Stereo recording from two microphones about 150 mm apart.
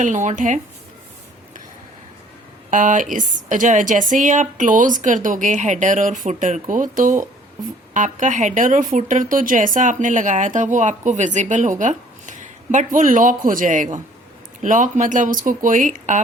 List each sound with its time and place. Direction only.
0.0 s a woman's voice: 55° right (ahead or behind)
2.6 s a woman's voice: 60° right (ahead or behind)